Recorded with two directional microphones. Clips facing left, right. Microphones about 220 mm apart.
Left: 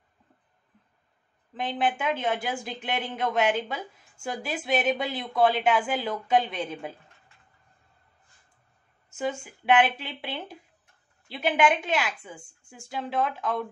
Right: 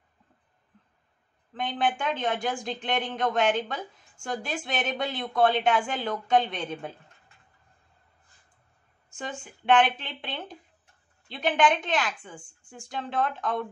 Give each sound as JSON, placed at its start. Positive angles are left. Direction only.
{"t": 1.5, "sound": "speech", "side_deg": 5}
{"t": 9.1, "sound": "speech", "side_deg": 5}